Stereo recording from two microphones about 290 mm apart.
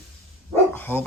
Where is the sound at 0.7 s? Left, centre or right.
Centre.